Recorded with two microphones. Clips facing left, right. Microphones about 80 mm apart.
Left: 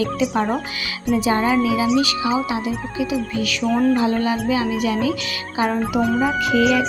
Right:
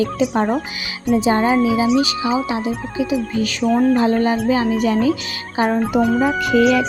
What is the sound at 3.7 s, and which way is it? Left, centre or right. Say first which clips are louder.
Speech: right 2 dB; centre.